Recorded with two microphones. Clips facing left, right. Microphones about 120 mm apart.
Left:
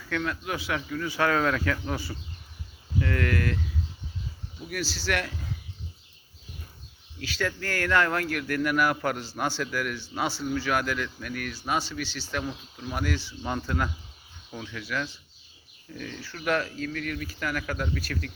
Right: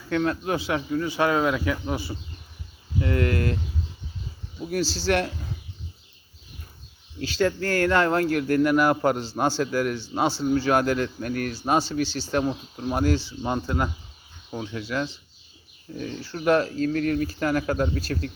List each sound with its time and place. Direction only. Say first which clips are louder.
0.1 s speech: right 6 dB; 35° right (ahead or behind)
4.6 s speech: right 7 dB; 30° right (ahead or behind)
7.2 s speech: right 7 dB; 30° right (ahead or behind)